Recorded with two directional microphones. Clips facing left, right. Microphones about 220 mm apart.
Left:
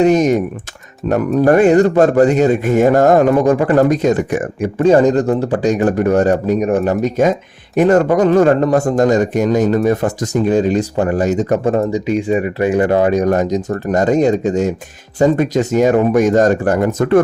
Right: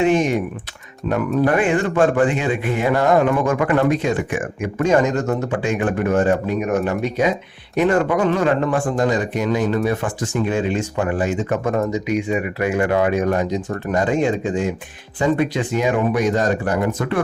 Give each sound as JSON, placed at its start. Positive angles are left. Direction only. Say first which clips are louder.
{"t": 0.0, "sound": "speech", "louder": "left 5 dB", "side_deg": 40}